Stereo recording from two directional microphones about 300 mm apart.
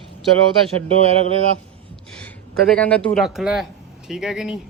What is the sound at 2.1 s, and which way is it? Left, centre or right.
Speech, centre.